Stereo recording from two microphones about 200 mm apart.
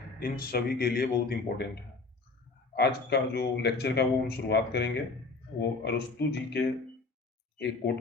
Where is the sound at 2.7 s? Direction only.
55° left (ahead or behind).